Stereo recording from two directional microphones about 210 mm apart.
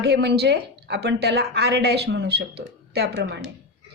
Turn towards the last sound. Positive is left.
turn(degrees=-50)  # may be behind; listen again after turning